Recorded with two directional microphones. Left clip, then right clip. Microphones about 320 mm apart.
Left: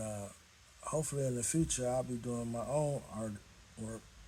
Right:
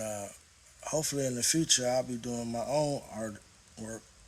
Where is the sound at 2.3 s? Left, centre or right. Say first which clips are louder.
Right 4 dB; right.